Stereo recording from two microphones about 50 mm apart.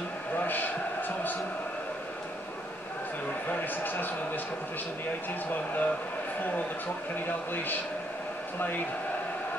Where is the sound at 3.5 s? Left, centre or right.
Left.